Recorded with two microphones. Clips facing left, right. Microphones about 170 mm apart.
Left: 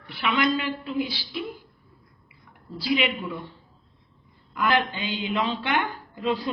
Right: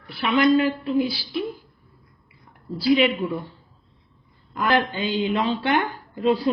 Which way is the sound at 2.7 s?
35° right (ahead or behind).